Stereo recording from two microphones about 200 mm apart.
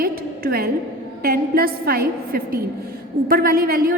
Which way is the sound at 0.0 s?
50° right (ahead or behind).